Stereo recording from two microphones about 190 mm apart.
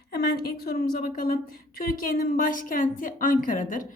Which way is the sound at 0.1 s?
60° left (ahead or behind).